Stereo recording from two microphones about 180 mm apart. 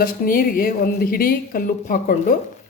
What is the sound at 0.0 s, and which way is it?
Speech, 55° left (ahead or behind).